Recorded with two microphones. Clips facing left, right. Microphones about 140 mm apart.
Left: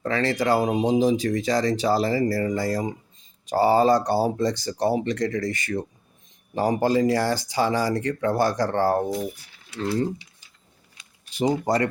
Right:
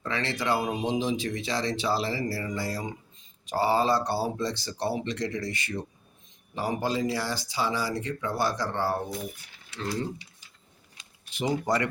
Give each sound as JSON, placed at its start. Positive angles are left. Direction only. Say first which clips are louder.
{"t": 0.0, "sound": "speech", "louder": "left 7 dB", "side_deg": 40}
{"t": 11.3, "sound": "speech", "louder": "left 5 dB", "side_deg": 40}